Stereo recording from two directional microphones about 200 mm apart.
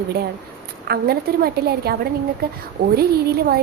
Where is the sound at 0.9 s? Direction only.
50° right (ahead or behind).